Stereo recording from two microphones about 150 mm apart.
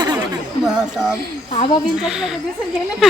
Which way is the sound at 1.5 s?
40° left (ahead or behind).